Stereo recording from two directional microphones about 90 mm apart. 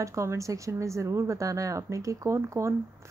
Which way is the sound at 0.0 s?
35° right (ahead or behind).